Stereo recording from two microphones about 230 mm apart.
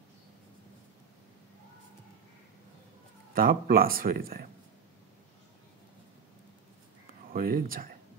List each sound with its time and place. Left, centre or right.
3.3 s speech: right
7.3 s speech: right